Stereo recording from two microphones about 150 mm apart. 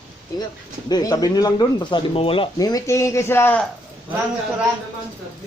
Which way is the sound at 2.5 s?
25° left (ahead or behind).